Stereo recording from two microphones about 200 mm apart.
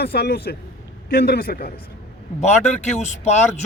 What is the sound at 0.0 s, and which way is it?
A man's voice, 55° left (ahead or behind).